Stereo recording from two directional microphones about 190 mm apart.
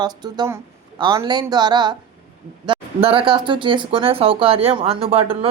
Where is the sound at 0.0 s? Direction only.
20° right (ahead or behind).